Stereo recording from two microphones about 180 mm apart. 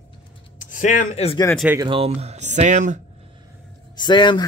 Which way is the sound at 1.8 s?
30° right (ahead or behind).